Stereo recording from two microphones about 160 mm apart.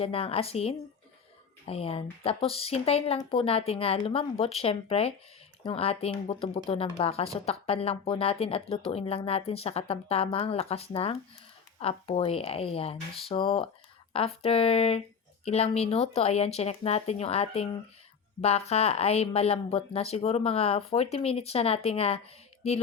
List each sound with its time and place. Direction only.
0.0 s speech: 35° left (ahead or behind)